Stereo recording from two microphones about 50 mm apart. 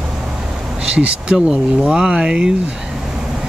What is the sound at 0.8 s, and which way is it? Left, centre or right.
Speech, centre.